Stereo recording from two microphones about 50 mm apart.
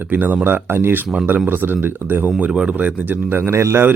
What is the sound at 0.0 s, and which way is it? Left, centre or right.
Speech, right.